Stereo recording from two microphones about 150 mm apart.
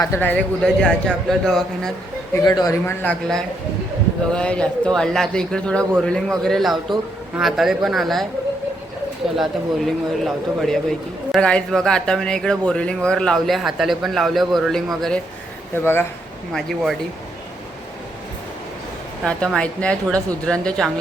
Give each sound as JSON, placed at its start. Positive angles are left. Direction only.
{"t": 0.0, "sound": "a man's voice", "side_deg": 15}
{"t": 2.3, "sound": "speech", "side_deg": 25}
{"t": 3.0, "sound": "a man's voice", "side_deg": 5}
{"t": 9.3, "sound": "speech", "side_deg": 0}
{"t": 15.7, "sound": "a man's voice", "side_deg": 15}
{"t": 16.5, "sound": "speech", "side_deg": 5}
{"t": 19.2, "sound": "a man's voice", "side_deg": 5}